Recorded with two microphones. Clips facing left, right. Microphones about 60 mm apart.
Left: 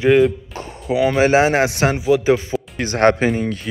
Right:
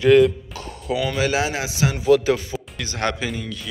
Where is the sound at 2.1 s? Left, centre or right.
Left.